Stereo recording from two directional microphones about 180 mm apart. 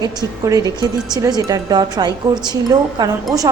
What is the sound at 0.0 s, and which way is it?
Speech, 20° right (ahead or behind).